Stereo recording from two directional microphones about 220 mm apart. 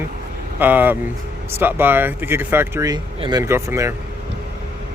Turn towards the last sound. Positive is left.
turn(degrees=-10)  # may be behind; listen again after turning